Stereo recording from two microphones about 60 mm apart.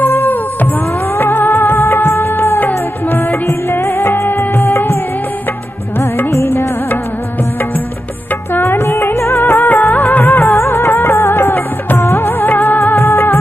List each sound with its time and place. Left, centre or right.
0.0 s music: left
1.1 s music of bollywood: left
3.7 s music: left
5.9 s music: left
8.5 s music of bollywood: left